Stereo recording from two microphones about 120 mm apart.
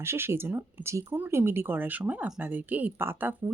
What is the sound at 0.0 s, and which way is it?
Speech, 20° right (ahead or behind).